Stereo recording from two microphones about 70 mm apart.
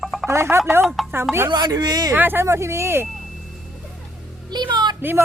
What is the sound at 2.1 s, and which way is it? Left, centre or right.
Speech, right.